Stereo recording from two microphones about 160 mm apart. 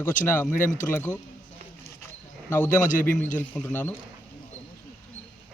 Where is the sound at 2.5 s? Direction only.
15° left (ahead or behind).